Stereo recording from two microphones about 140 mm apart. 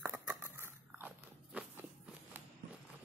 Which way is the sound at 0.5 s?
15° right (ahead or behind).